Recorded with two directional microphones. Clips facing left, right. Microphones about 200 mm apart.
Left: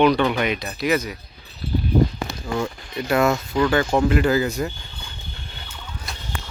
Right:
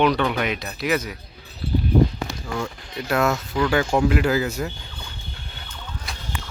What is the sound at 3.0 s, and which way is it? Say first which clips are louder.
Speech: left 2 dB; centre (ahead or behind).